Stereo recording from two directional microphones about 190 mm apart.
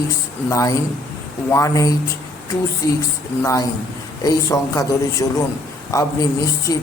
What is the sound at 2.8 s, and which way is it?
Speech, 20° left (ahead or behind).